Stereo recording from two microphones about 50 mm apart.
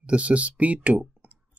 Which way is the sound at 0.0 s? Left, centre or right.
Right.